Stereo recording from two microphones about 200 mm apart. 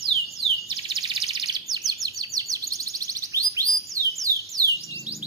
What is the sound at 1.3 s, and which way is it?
Chirp, 20° right (ahead or behind).